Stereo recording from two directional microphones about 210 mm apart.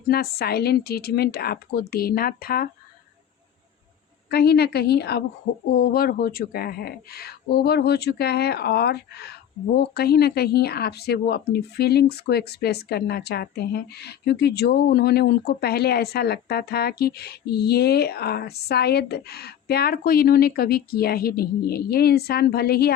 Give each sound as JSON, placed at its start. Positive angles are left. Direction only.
{"t": 0.1, "sound": "speech", "side_deg": 50}
{"t": 4.3, "sound": "speech", "side_deg": 50}